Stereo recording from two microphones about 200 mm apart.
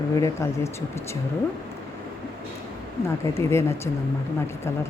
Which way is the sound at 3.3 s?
15° left (ahead or behind).